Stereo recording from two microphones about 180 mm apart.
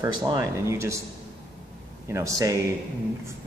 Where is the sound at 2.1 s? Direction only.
20° right (ahead or behind).